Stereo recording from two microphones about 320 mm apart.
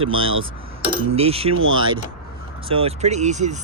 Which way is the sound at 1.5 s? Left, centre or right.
Right.